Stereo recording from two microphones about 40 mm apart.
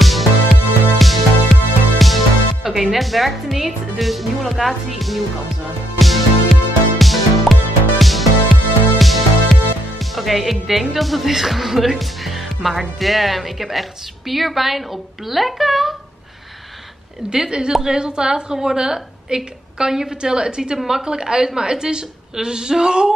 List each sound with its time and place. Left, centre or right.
0.0 s music: centre
17.3 s a woman's voice: centre